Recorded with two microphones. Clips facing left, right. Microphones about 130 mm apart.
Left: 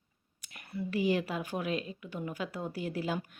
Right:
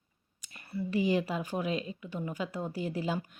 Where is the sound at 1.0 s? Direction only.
10° left (ahead or behind).